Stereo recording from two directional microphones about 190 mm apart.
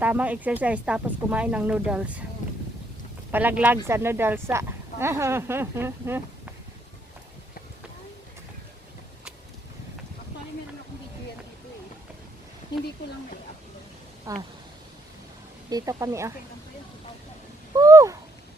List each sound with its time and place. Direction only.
0.0 s speech: 10° right (ahead or behind)
2.4 s boat: 40° left (ahead or behind)
3.3 s speech: 10° right (ahead or behind)
14.3 s speech: 15° right (ahead or behind)
15.7 s speech: 15° right (ahead or behind)
17.7 s owl: 15° right (ahead or behind)